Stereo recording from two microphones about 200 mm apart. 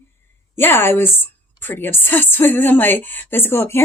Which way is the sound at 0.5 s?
10° left (ahead or behind).